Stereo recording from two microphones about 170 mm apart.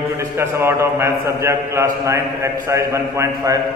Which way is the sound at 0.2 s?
15° right (ahead or behind).